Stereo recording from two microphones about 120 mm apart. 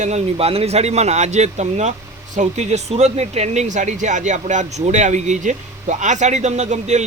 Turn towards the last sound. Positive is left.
turn(degrees=-70)  # may be behind; listen again after turning